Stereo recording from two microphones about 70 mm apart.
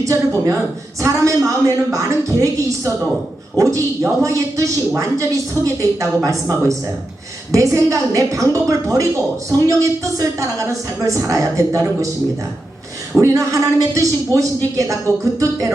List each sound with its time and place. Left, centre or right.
0.0 s a man's voice: right
4.2 s a man's voice: right
13.1 s a man's voice: right